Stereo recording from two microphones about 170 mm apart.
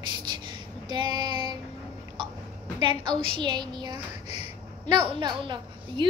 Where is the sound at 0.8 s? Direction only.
25° right (ahead or behind).